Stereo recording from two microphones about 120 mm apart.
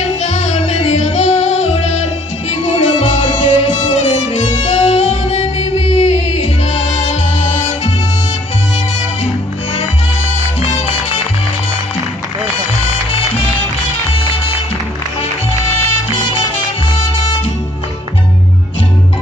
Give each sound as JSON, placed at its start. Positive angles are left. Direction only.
{"t": 0.0, "sound": "music", "side_deg": 70}